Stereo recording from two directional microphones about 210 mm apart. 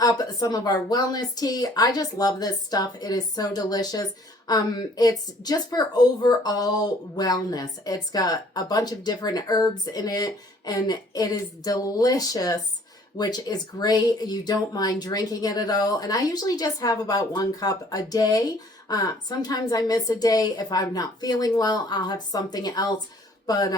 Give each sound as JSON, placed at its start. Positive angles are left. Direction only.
{"t": 0.0, "sound": "a woman's voice", "side_deg": 20}